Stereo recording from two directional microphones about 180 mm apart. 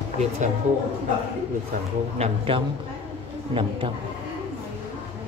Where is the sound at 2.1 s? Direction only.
35° right (ahead or behind).